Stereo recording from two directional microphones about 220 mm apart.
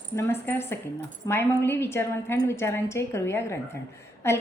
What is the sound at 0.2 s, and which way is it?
A woman's voice, 10° left (ahead or behind).